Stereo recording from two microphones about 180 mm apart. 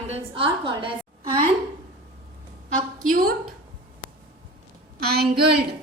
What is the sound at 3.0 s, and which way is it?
Speech, 50° right (ahead or behind).